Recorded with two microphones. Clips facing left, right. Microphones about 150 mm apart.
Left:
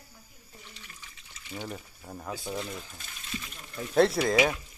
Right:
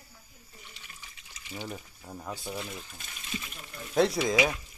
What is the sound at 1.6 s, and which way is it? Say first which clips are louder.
Speech: right 1 dB; centre (ahead or behind).